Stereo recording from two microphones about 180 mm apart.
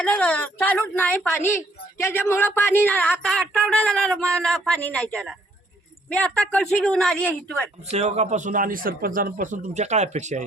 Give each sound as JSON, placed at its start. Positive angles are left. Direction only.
{"t": 0.0, "sound": "speech", "side_deg": 5}
{"t": 7.9, "sound": "a man's voice", "side_deg": -40}